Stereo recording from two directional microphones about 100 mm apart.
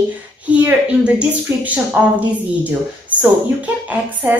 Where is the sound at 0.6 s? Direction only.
10° right (ahead or behind).